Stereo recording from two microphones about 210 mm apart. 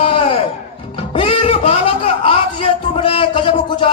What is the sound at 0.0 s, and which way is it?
Music, 30° left (ahead or behind).